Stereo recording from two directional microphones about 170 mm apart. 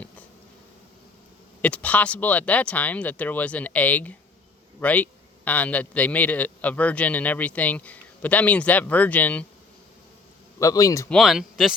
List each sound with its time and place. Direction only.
1.6 s a man's voice: 10° left (ahead or behind)
10.6 s a man's voice: 20° left (ahead or behind)
11.1 s speech: centre (ahead or behind)